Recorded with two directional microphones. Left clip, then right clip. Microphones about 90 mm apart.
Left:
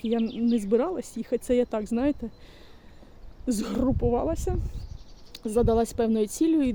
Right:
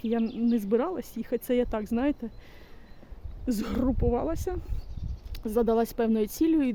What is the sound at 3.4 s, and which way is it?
Speech, 30° left (ahead or behind).